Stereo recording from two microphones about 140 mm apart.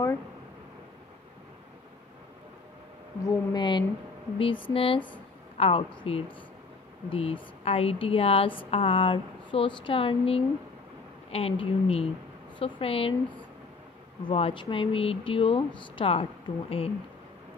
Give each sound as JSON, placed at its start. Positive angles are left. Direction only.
{"t": 3.3, "sound": "speech", "side_deg": 30}
{"t": 14.2, "sound": "speech", "side_deg": 40}